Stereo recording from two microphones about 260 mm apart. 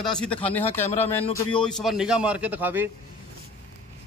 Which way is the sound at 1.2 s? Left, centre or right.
Centre.